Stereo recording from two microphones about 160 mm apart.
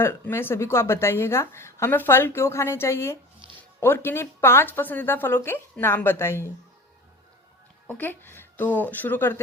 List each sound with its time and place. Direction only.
0.0 s a woman's voice: 15° left (ahead or behind)
7.9 s a woman's voice: 10° left (ahead or behind)